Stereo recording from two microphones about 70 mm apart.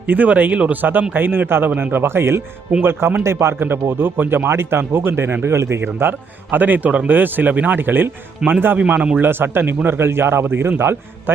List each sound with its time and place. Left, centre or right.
0.1 s speech: right
8.4 s a man's voice: centre
9.2 s speech: right